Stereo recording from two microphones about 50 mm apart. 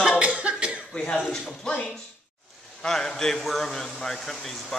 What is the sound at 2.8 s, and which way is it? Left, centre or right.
A man's voice, centre.